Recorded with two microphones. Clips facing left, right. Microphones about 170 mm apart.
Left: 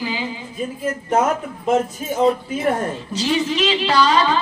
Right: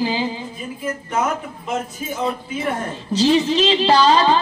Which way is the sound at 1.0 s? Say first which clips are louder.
Left 4 dB; 45° left (ahead or behind).